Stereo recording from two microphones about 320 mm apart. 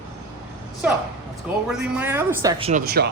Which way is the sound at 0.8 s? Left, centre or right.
Centre.